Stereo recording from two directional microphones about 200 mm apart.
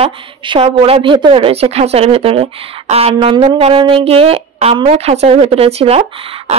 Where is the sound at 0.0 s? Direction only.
25° right (ahead or behind).